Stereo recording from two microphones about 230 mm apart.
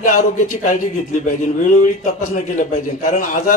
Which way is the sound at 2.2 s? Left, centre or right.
Left.